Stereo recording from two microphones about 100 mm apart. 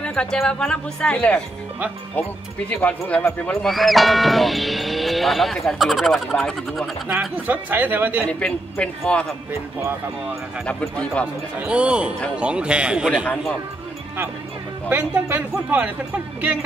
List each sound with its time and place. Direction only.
0.0 s a woman's voice: 10° left (ahead or behind)
2.7 s a woman's voice: 15° left (ahead or behind)
3.6 s speech: centre (ahead or behind)
7.1 s speech: 15° right (ahead or behind)
8.3 s a woman's voice: 10° left (ahead or behind)
9.5 s speech: 25° right (ahead or behind)
10.7 s a woman's voice: 15° left (ahead or behind)
11.6 s speech: 10° right (ahead or behind)
14.9 s speech: 15° right (ahead or behind)